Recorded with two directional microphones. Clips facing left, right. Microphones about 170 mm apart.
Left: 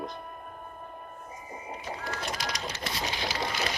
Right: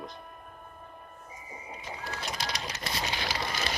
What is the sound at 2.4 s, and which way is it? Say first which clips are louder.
Printer: left 1 dB; 30° right (ahead or behind).